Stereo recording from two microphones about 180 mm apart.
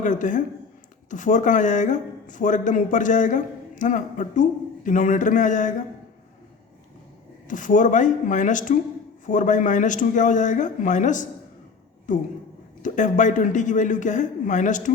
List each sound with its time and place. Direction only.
0.0 s speech: 45° left (ahead or behind)
7.4 s speech: 45° left (ahead or behind)